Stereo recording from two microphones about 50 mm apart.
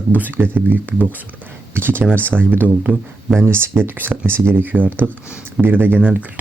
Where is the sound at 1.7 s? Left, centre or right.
Right.